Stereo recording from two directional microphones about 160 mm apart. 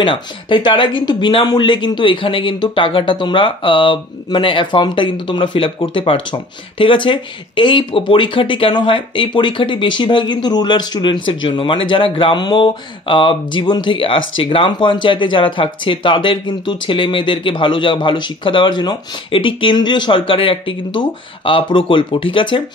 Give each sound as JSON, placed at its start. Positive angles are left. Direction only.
{"t": 0.0, "sound": "speech", "side_deg": 30}